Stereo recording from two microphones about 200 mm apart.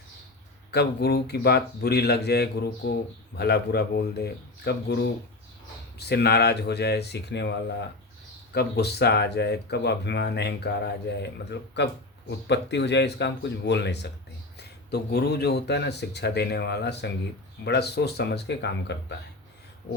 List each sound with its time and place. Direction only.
0.7 s speech: 55° left (ahead or behind)
6.0 s speech: 55° left (ahead or behind)
8.5 s speech: 55° left (ahead or behind)